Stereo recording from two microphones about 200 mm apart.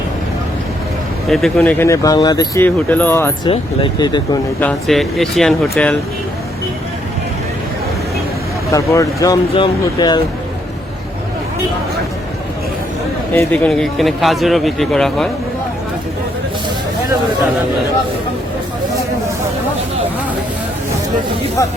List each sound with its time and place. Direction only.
1.3 s speech: centre (ahead or behind); by 2.6 s 20° left (ahead or behind)
2.6 s speech: 10° left (ahead or behind)
3.5 s speech: 25° left (ahead or behind)
4.6 s speech: centre (ahead or behind)
8.7 s speech: 15° left (ahead or behind)
13.3 s speech: 5° left (ahead or behind)